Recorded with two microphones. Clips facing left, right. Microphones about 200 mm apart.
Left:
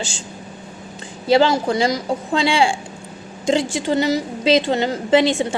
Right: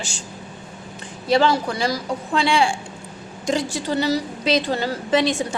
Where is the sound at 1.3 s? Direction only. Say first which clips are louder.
Left 3 dB; 30° left (ahead or behind).